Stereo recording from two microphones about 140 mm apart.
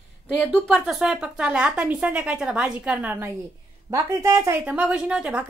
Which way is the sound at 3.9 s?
20° right (ahead or behind).